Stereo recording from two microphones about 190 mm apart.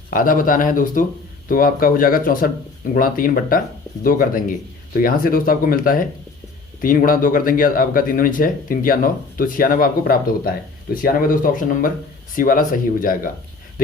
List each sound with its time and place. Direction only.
0.1 s speech: 45° left (ahead or behind)